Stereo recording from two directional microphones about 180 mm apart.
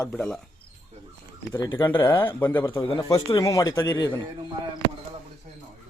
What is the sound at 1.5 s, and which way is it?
Speech, 15° left (ahead or behind).